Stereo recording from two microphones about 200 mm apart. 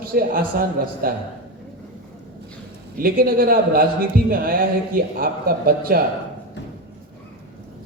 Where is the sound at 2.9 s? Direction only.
45° right (ahead or behind).